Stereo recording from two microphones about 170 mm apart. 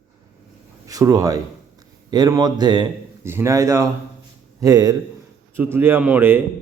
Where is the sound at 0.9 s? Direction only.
20° right (ahead or behind).